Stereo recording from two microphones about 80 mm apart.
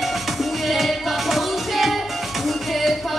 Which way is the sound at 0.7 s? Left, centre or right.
Centre.